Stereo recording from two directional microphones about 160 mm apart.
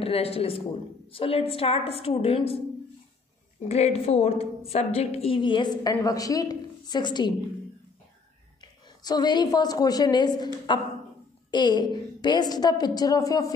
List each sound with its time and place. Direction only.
0.0 s a woman's voice: 40° left (ahead or behind)
3.6 s a woman's voice: 40° left (ahead or behind)
8.5 s a woman's voice: 25° left (ahead or behind)